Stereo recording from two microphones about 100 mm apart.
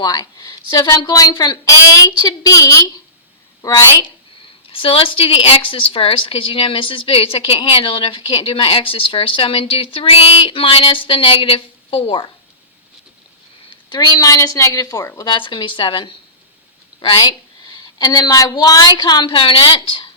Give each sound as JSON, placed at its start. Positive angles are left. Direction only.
{"t": 0.0, "sound": "a woman's voice", "side_deg": 40}
{"t": 4.7, "sound": "a woman's voice", "side_deg": 65}
{"t": 13.9, "sound": "a woman's voice", "side_deg": 45}
{"t": 15.3, "sound": "a woman's voice", "side_deg": 50}
{"t": 17.7, "sound": "a woman's voice", "side_deg": 40}